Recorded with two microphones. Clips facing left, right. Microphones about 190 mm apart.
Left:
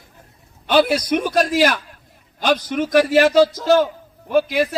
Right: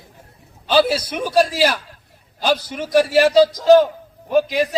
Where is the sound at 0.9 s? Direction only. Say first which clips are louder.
Even; 10° right (ahead or behind).